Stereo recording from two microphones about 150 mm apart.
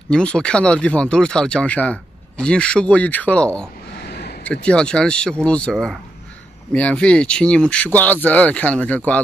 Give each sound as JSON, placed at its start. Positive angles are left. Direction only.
{"t": 0.1, "sound": "speech", "side_deg": 5}
{"t": 3.9, "sound": "a sound", "side_deg": 90}
{"t": 4.5, "sound": "speech", "side_deg": 5}